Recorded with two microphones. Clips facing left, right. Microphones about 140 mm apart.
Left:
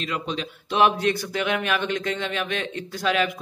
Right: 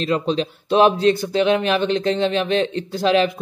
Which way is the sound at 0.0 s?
35° right (ahead or behind).